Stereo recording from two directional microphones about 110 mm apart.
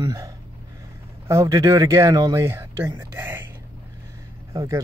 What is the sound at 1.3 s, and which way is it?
Speech, 30° right (ahead or behind).